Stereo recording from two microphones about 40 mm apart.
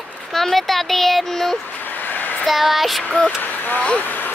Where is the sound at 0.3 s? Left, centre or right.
Centre.